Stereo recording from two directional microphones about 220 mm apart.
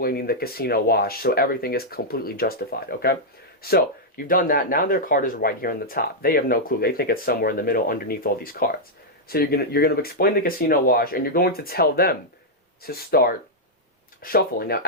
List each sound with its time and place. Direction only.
0.0 s speech: 45° left (ahead or behind)